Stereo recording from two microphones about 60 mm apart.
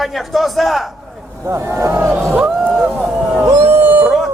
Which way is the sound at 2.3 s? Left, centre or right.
Centre.